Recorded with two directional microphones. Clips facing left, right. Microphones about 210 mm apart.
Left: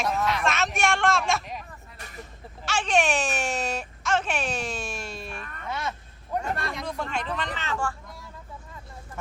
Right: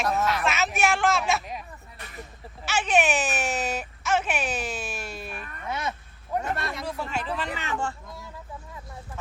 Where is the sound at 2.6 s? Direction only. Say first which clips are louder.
Right 1 dB; 5° right (ahead or behind).